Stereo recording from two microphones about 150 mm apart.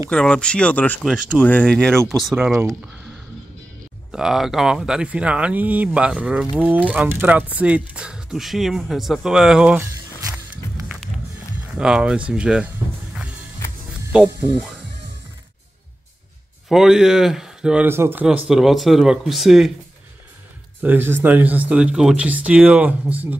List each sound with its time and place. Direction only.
0.1 s speech: 5° left (ahead or behind)
2.3 s speech: 15° right (ahead or behind)
4.1 s speech: 5° right (ahead or behind)
10.3 s music: 5° right (ahead or behind)
11.8 s speech: 5° right (ahead or behind)
14.1 s speech: 10° right (ahead or behind)
16.6 s speech: 5° right (ahead or behind)
18.2 s speech: 5° right (ahead or behind)
20.8 s speech: 15° right (ahead or behind)